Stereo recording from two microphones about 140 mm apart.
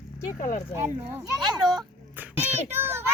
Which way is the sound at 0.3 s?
70° left (ahead or behind).